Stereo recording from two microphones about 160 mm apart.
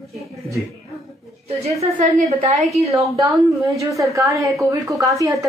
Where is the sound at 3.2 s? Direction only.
20° right (ahead or behind).